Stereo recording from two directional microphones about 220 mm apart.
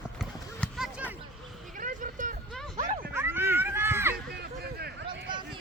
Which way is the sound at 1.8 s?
35° right (ahead or behind).